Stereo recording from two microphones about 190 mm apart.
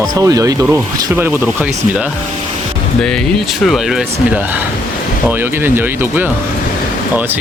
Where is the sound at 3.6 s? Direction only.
Centre (ahead or behind).